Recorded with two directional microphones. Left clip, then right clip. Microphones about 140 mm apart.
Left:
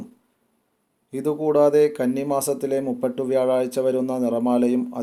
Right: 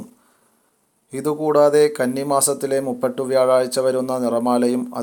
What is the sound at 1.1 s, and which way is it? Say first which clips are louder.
Speech: right 3 dB; 5° right (ahead or behind).